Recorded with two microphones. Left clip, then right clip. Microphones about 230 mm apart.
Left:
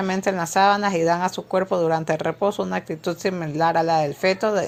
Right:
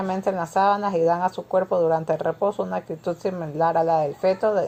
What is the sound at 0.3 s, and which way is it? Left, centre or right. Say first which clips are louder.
Speech: left 2 dB; left.